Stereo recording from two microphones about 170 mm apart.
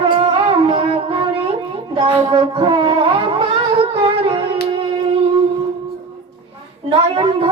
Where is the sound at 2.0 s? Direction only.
30° right (ahead or behind).